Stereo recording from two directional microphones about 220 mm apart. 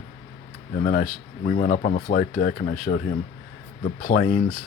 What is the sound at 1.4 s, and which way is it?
Speech, 40° left (ahead or behind).